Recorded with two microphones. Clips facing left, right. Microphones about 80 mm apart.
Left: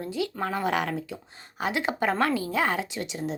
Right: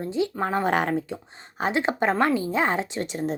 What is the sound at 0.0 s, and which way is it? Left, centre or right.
A woman's voice, right.